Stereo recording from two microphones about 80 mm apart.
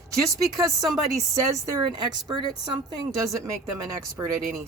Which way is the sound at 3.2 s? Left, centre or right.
Right.